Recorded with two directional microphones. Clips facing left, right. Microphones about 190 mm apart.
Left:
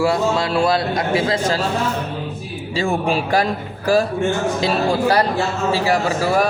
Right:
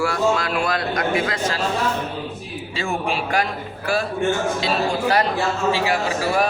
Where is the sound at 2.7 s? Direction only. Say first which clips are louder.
Left 5 dB; 35° left (ahead or behind).